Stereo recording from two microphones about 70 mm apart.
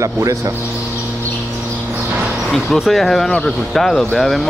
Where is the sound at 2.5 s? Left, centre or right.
Centre.